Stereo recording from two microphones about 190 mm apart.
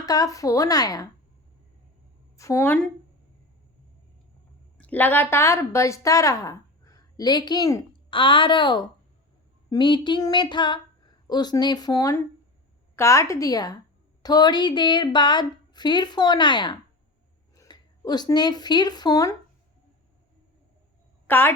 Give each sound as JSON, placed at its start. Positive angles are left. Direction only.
{"t": 0.0, "sound": "speech", "side_deg": 20}
{"t": 2.3, "sound": "a woman's voice", "side_deg": 15}
{"t": 4.8, "sound": "a woman's voice", "side_deg": 10}
{"t": 21.2, "sound": "speech", "side_deg": 10}